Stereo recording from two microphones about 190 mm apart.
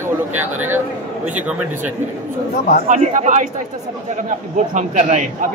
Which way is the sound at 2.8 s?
40° right (ahead or behind).